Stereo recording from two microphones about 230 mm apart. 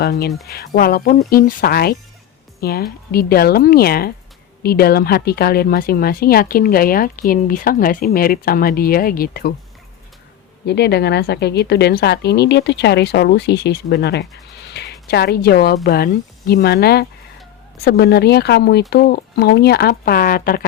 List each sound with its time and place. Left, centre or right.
0.0 s a woman's voice: left
10.7 s a woman's voice: left
14.7 s a sound: left
15.0 s a woman's voice: left